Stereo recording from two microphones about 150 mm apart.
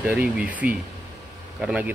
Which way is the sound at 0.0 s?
10° right (ahead or behind).